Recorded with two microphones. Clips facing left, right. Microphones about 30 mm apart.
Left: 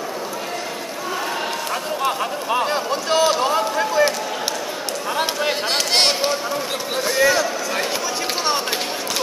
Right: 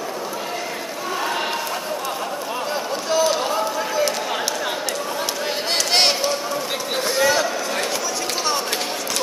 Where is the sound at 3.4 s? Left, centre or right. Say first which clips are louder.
Left 3 dB; left.